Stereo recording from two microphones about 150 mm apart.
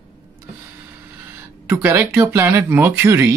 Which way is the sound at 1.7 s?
15° right (ahead or behind).